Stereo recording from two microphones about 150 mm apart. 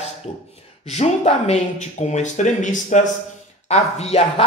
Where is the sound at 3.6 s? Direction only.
45° left (ahead or behind).